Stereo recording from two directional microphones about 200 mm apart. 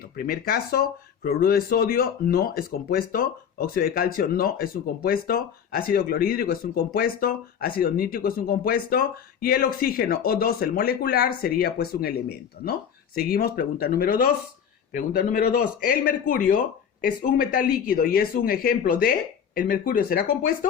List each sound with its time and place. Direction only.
0.2 s speech: 50° left (ahead or behind)
13.1 s speech: 45° left (ahead or behind)